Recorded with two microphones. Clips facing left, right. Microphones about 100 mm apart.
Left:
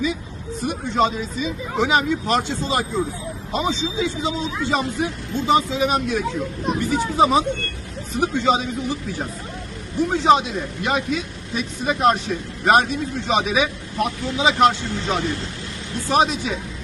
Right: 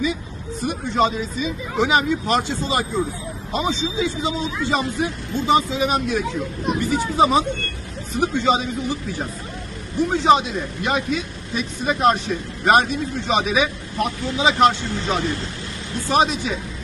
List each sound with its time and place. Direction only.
0.6 s speech: centre (ahead or behind)